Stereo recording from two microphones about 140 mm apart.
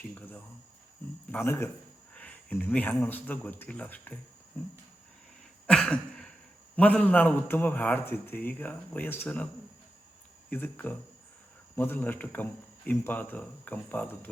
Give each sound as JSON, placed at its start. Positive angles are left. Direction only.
{"t": 0.1, "sound": "a man's voice", "side_deg": 15}
{"t": 5.6, "sound": "a sound", "side_deg": 5}
{"t": 6.7, "sound": "a man's voice", "side_deg": 10}
{"t": 10.5, "sound": "a man's voice", "side_deg": 15}